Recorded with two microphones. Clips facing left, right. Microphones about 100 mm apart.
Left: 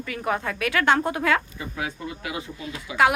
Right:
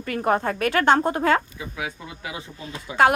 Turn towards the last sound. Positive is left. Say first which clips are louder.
# right 2 dB
turn(degrees=-35)  # may be behind; listen again after turning